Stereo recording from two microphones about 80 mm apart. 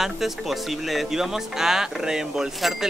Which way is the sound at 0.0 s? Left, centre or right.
Centre.